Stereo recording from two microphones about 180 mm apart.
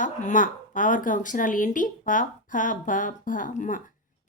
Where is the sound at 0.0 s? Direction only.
45° left (ahead or behind).